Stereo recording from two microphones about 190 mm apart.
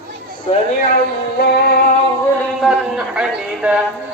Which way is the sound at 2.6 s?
Centre (ahead or behind).